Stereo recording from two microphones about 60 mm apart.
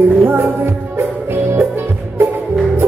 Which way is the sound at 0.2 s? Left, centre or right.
Right.